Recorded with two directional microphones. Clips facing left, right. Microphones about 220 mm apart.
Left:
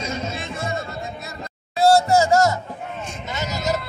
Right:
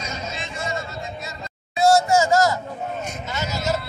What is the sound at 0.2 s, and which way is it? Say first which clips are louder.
Music: left 3 dB; 55° left (ahead or behind).